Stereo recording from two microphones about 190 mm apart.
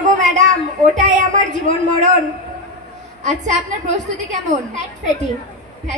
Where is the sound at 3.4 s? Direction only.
40° right (ahead or behind).